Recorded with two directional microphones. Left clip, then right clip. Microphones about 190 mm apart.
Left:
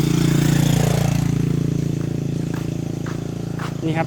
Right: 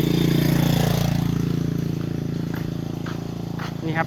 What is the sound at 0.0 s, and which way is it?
Vehicle, 20° left (ahead or behind).